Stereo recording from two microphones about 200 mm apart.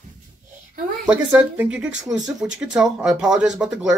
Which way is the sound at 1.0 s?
5° right (ahead or behind).